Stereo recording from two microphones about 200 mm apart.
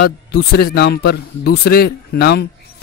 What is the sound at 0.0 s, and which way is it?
A man's voice, 50° left (ahead or behind).